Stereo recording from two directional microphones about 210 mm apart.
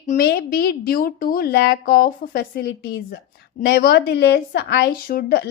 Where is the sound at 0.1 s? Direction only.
45° left (ahead or behind).